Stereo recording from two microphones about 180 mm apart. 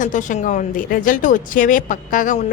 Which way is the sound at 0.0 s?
45° left (ahead or behind).